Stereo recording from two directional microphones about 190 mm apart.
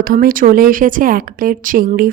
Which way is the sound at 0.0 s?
50° right (ahead or behind).